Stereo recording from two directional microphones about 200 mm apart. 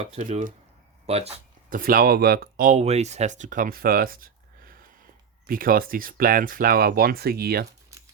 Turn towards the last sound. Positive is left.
turn(degrees=-50)  # may be behind; listen again after turning